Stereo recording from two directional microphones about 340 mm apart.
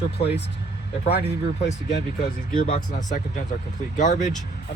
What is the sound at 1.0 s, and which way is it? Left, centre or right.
Speech, centre.